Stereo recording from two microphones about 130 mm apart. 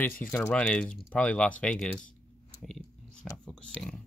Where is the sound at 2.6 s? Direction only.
Centre (ahead or behind).